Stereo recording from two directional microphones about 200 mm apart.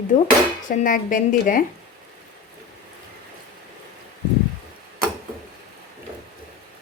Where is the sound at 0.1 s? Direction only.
40° left (ahead or behind).